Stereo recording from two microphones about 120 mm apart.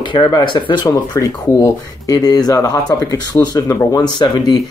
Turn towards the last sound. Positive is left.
turn(degrees=35)  # may be behind; listen again after turning